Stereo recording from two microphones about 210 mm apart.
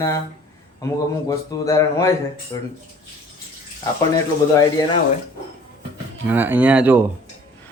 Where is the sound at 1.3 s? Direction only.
15° left (ahead or behind).